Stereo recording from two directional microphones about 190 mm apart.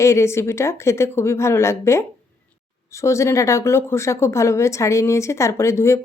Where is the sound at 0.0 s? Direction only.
15° left (ahead or behind).